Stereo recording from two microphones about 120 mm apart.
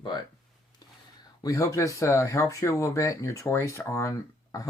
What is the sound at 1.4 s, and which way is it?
Speech, 25° left (ahead or behind).